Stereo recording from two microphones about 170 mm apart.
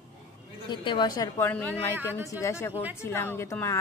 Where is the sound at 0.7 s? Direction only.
25° left (ahead or behind).